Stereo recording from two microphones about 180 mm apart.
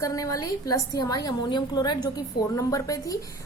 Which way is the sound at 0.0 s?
20° left (ahead or behind).